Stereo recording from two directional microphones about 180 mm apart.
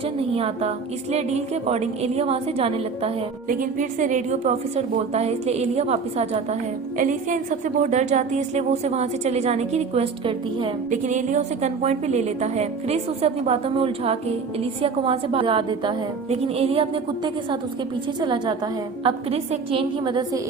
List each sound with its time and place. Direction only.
0.2 s a woman's voice: 30° right (ahead or behind)
3.5 s a woman's voice: 50° right (ahead or behind); by 10.7 s 30° right (ahead or behind)
11.0 s a woman's voice: 45° right (ahead or behind); by 20.4 s 25° right (ahead or behind)